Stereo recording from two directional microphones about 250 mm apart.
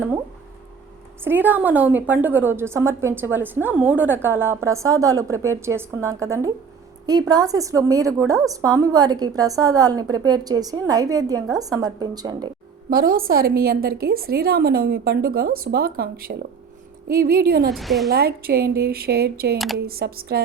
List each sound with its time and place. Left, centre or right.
1.2 s a woman's voice: centre
12.9 s a woman's voice: right
17.7 s a woman's voice: centre
18.1 s a woman's voice: right
19.5 s a woman's voice: centre
19.8 s a woman's voice: right